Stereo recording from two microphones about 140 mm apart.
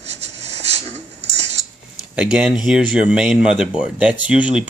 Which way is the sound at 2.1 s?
5° right (ahead or behind).